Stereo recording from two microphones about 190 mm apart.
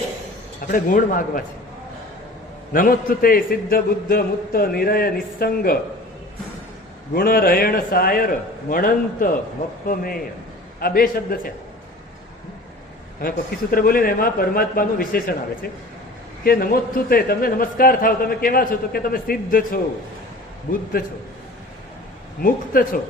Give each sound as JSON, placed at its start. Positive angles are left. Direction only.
{"t": 0.7, "sound": "a man's voice", "side_deg": 45}
{"t": 2.7, "sound": "a man's voice", "side_deg": 45}
{"t": 7.1, "sound": "a man's voice", "side_deg": 50}
{"t": 13.2, "sound": "a man's voice", "side_deg": 50}
{"t": 21.0, "sound": "a man's voice", "side_deg": 50}
{"t": 22.4, "sound": "a man's voice", "side_deg": 45}